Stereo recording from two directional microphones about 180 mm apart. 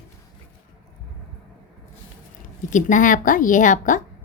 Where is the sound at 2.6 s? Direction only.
45° left (ahead or behind).